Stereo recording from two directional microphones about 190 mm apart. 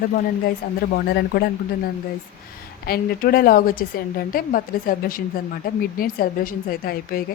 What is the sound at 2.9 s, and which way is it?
A woman's voice, 50° left (ahead or behind).